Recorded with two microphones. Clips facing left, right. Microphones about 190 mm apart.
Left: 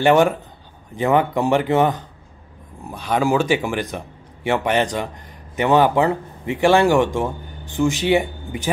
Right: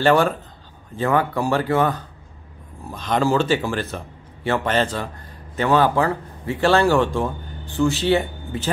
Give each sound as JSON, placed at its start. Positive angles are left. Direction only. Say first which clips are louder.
{"t": 0.0, "sound": "a man's voice", "louder": "left 2 dB", "side_deg": 20}